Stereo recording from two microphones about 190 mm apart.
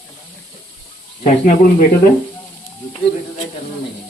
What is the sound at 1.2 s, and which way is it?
Speech, 40° left (ahead or behind).